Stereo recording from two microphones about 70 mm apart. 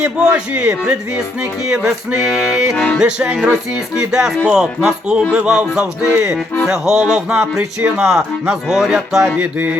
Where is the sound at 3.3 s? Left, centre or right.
Centre.